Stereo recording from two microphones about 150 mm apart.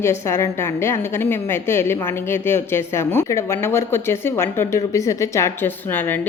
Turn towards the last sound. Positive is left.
turn(degrees=15)  # may be behind; listen again after turning